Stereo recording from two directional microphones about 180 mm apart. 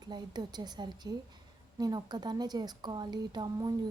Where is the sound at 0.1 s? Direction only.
25° right (ahead or behind).